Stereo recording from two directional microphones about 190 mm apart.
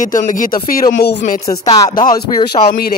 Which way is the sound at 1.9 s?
45° left (ahead or behind).